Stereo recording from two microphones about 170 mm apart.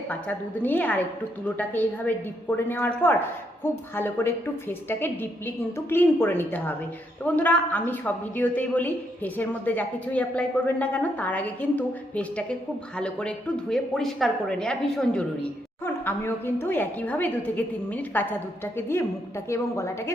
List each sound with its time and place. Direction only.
0.1 s a man's voice: 10° left (ahead or behind)